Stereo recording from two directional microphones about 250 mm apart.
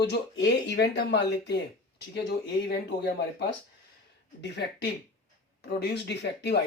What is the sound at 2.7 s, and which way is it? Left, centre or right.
Speech, left.